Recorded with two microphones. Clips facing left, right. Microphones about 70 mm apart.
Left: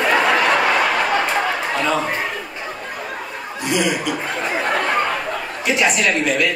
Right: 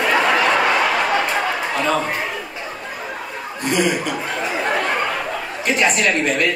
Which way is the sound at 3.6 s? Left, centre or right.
Right.